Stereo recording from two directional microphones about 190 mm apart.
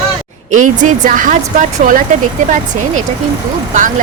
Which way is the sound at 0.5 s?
45° right (ahead or behind).